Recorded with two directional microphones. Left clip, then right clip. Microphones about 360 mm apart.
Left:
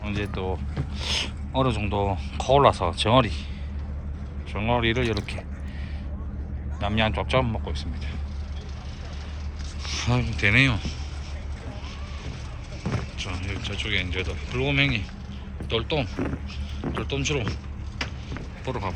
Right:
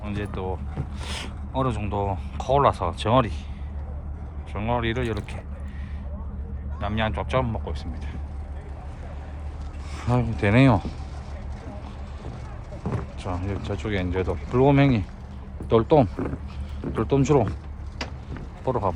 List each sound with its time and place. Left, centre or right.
0.0 s speech: centre
4.5 s speech: centre
6.7 s speech: centre
10.0 s speech: centre
13.1 s a sound: centre
13.5 s speech: centre
18.0 s a sound: right
18.6 s speech: centre